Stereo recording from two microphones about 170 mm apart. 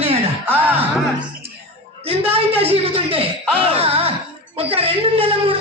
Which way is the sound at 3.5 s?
35° right (ahead or behind).